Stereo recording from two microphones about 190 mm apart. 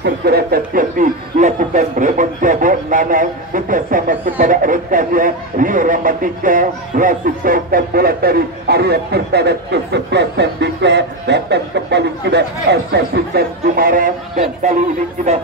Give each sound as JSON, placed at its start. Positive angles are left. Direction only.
{"t": 0.0, "sound": "speech", "side_deg": -55}